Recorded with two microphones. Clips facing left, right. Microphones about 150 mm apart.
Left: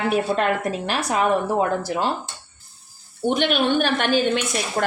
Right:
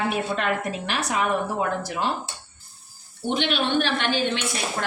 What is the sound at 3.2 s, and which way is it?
A woman's voice, 50° left (ahead or behind).